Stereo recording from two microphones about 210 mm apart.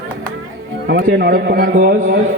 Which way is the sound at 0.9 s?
50° right (ahead or behind).